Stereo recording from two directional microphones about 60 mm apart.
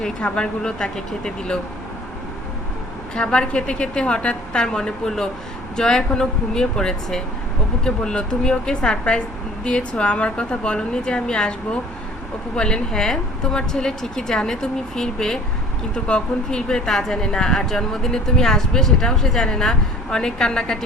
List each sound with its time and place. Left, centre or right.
0.0 s speech: centre
3.2 s speech: centre